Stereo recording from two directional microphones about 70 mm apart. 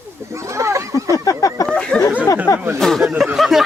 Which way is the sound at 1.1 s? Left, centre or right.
Left.